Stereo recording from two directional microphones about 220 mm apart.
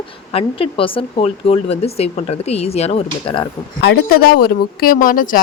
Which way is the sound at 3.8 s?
45° left (ahead or behind).